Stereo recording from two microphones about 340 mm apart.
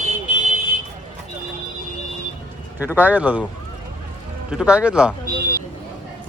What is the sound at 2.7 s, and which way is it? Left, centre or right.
Speech, centre.